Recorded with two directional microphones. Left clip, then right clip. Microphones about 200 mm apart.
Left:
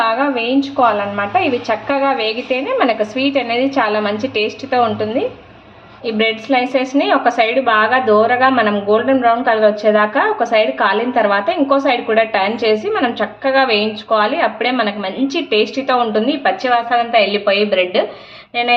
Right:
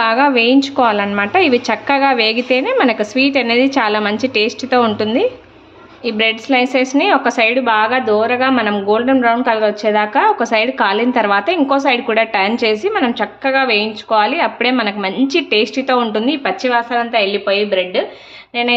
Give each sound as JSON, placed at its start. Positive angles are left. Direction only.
{"t": 0.0, "sound": "a woman's voice", "side_deg": -50}
{"t": 6.1, "sound": "a woman's voice", "side_deg": -30}